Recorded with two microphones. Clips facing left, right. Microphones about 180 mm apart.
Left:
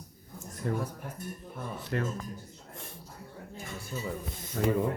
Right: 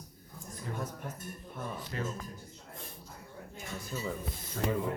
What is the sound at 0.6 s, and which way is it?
Speech, 60° left (ahead or behind).